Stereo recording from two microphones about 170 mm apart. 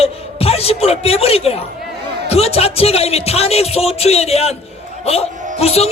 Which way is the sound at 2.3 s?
35° left (ahead or behind).